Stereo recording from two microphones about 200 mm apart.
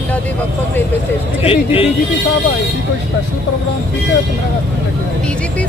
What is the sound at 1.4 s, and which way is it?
Speech, 30° left (ahead or behind).